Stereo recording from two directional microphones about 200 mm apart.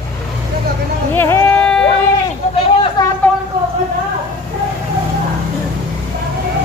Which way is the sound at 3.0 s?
20° left (ahead or behind).